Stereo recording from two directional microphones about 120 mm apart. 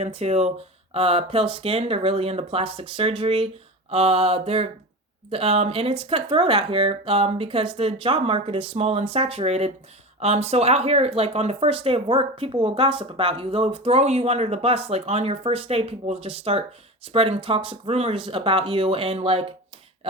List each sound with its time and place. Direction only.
0.0 s speech: 60° right (ahead or behind)